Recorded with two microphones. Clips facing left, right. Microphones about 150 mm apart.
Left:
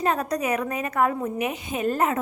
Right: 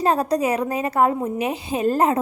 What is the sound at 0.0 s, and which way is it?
A woman's voice, 35° right (ahead or behind).